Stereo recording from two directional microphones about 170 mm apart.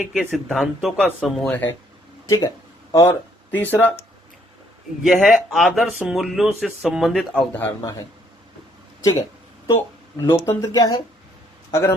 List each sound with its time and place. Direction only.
0.0 s speech: 5° right (ahead or behind)
2.2 s speech: 20° left (ahead or behind)
5.0 s speech: centre (ahead or behind)
10.2 s speech: 15° left (ahead or behind)